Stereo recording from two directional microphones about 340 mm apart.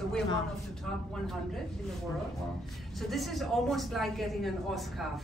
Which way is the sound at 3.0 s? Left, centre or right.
Centre.